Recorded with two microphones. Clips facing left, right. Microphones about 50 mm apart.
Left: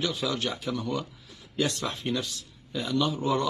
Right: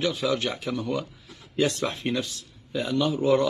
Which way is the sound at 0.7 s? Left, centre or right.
Centre.